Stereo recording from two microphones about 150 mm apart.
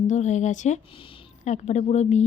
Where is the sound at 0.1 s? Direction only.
55° left (ahead or behind).